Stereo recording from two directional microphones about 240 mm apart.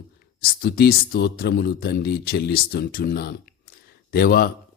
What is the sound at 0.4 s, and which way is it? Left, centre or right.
Speech, left.